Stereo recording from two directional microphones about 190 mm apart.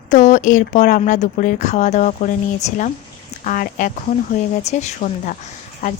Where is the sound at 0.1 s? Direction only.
40° left (ahead or behind).